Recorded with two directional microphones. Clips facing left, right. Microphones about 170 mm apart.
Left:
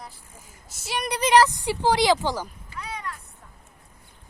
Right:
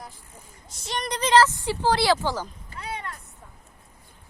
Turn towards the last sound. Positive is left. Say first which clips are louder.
# even
turn(degrees=-30)  # may be behind; listen again after turning